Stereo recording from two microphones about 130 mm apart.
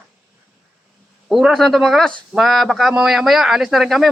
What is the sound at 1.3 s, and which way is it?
A man's voice, 5° right (ahead or behind).